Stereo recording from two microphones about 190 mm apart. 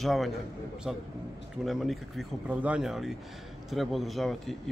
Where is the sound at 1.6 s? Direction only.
Centre (ahead or behind).